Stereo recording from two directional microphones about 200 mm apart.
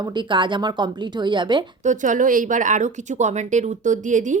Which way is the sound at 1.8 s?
40° right (ahead or behind).